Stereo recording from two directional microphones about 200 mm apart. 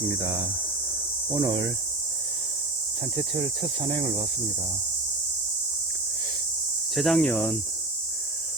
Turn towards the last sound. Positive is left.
turn(degrees=5)  # may be behind; listen again after turning